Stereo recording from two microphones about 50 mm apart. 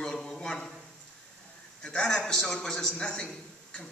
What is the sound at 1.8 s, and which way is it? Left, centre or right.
Speech, left.